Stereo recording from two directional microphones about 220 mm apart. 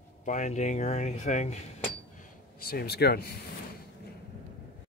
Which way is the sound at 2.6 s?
45° left (ahead or behind).